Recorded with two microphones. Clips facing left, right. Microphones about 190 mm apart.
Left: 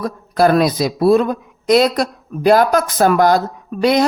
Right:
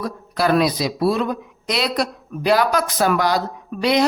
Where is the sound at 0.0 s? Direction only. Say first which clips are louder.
Left 7 dB; 50° left (ahead or behind).